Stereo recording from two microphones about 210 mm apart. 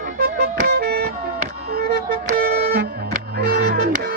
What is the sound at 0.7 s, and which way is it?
Vehicle, 50° right (ahead or behind).